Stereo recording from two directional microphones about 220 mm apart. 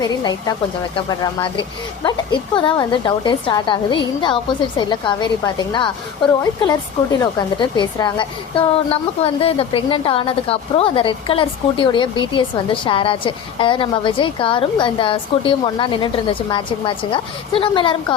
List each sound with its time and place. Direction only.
0.0 s speech: 20° left (ahead or behind)